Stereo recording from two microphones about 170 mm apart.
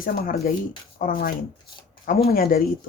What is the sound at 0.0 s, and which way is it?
Speech, 55° left (ahead or behind).